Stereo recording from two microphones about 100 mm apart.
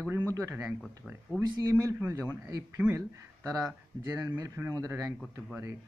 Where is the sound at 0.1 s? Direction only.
25° right (ahead or behind).